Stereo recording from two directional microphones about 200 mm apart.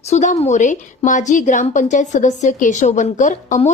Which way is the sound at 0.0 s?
35° left (ahead or behind).